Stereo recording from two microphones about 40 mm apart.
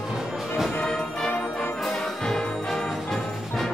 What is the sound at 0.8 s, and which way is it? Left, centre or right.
Brass instrument, centre.